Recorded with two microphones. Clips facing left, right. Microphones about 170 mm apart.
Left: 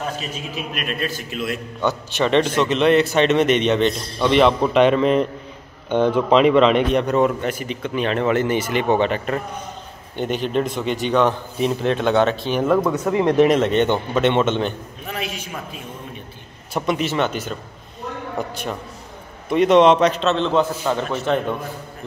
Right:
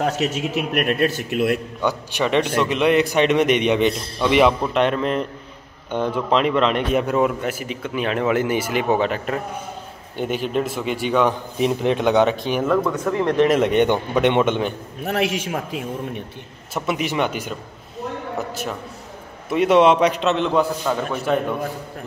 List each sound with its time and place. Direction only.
0.0 s a man's voice: 75° right (ahead or behind); by 1.6 s 60° right (ahead or behind)
1.8 s a man's voice: 10° right (ahead or behind)
12.6 s speech: 15° left (ahead or behind)
13.5 s a man's voice: 10° right (ahead or behind)
15.0 s a man's voice: 75° right (ahead or behind)
16.7 s a man's voice: 5° right (ahead or behind)